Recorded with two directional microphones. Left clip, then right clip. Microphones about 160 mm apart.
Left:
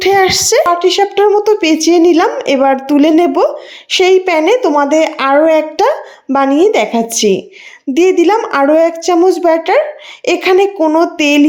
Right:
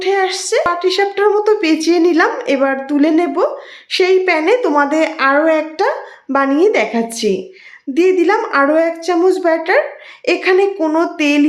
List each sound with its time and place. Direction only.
0.0 s a sound: 45° left (ahead or behind)
0.7 s a woman's voice: 25° left (ahead or behind)
10.8 s speech: 25° left (ahead or behind)